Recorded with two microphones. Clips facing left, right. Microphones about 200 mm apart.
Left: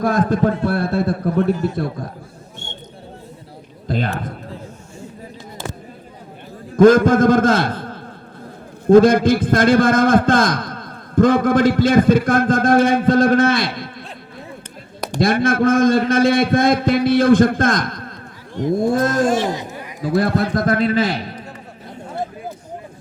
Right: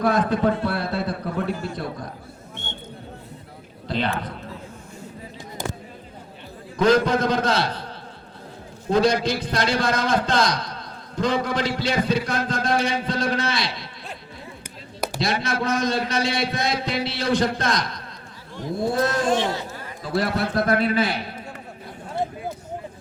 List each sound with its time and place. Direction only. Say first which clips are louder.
0.0 s a man's voice: left 3 dB; 50° left (ahead or behind)
3.8 s a man's voice: left 3 dB; 45° left (ahead or behind)
6.7 s a man's voice: left 8 dB; 50° left (ahead or behind)
15.2 s a man's voice: left 10 dB; 50° left (ahead or behind)
19.4 s a sound: left 4 dB; 15° left (ahead or behind)
20.1 s a man's voice: left 5 dB; 50° left (ahead or behind)